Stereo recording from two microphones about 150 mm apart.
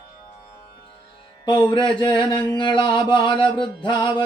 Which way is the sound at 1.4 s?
30° left (ahead or behind).